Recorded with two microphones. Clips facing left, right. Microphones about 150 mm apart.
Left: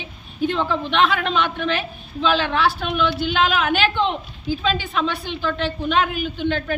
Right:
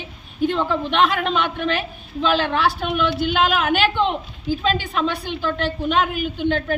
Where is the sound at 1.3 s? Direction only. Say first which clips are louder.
Even; 45° right (ahead or behind).